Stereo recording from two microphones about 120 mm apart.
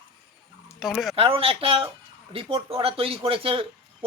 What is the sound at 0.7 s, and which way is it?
Speech, 5° right (ahead or behind).